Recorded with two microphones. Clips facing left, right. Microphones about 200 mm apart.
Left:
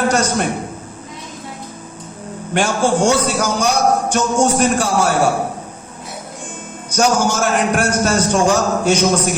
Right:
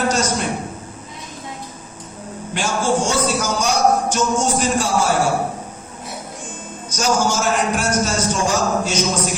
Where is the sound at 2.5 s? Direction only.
60° left (ahead or behind).